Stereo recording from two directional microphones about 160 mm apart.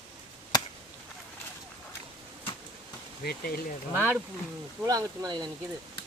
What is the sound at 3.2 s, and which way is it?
Speech, 70° left (ahead or behind).